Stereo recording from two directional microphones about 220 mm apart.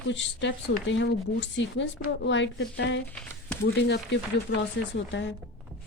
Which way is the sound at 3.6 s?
55° left (ahead or behind).